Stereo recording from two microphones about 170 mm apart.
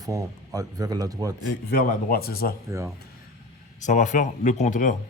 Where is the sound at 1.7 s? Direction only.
60° left (ahead or behind).